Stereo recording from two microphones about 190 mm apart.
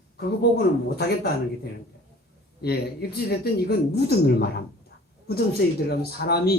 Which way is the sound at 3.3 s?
60° left (ahead or behind).